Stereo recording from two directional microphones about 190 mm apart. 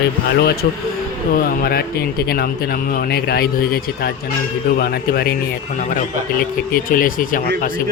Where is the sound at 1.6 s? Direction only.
55° left (ahead or behind).